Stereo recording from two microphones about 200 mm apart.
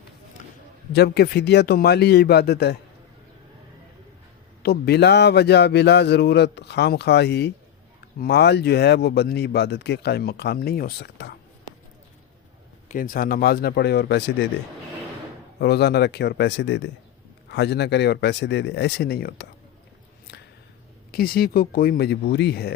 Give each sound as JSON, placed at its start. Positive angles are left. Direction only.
{"t": 0.9, "sound": "speech", "side_deg": 50}
{"t": 4.6, "sound": "speech", "side_deg": 55}
{"t": 12.9, "sound": "speech", "side_deg": 45}
{"t": 15.6, "sound": "speech", "side_deg": 55}
{"t": 21.1, "sound": "speech", "side_deg": 50}